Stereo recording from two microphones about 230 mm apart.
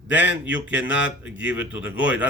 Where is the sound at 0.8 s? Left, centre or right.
Left.